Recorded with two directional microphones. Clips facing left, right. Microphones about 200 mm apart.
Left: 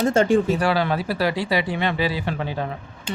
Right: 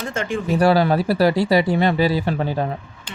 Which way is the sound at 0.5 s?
40° right (ahead or behind).